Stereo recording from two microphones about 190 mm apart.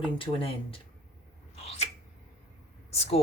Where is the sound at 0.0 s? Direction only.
30° left (ahead or behind).